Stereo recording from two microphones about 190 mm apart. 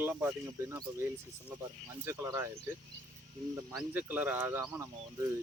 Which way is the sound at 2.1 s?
15° right (ahead or behind).